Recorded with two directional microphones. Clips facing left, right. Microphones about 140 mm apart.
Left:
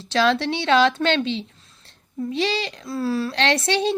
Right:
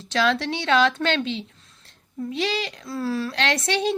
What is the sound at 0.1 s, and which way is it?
A woman's voice, 25° left (ahead or behind).